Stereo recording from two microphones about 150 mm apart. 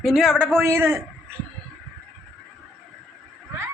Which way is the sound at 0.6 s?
20° right (ahead or behind).